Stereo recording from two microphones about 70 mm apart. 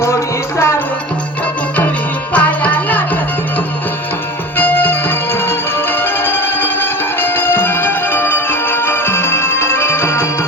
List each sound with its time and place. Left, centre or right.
0.0 s music: left
2.3 s music: left
4.5 s music: left